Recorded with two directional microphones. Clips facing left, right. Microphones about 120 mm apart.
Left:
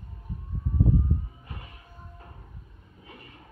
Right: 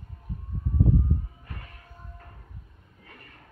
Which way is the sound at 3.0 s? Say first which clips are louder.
Left 3 dB; 10° left (ahead or behind).